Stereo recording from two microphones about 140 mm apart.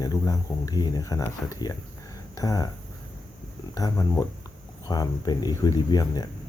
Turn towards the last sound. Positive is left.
turn(degrees=25)  # may be behind; listen again after turning